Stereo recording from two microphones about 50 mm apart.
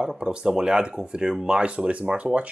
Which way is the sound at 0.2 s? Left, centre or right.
Centre.